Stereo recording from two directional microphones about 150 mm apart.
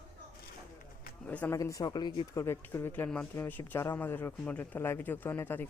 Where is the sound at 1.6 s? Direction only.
25° left (ahead or behind).